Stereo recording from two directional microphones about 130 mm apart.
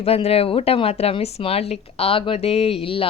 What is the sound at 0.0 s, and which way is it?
A woman's voice, 50° left (ahead or behind).